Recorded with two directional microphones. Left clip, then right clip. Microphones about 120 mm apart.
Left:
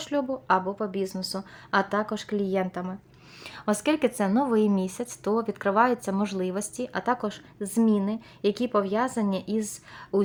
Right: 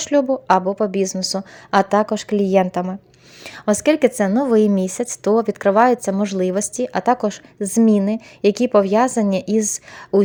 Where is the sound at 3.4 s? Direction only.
45° right (ahead or behind).